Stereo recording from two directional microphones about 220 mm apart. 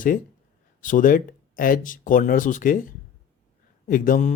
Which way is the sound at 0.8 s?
35° left (ahead or behind).